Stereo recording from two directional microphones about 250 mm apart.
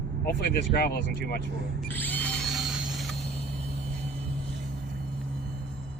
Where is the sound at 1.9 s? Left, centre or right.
Centre.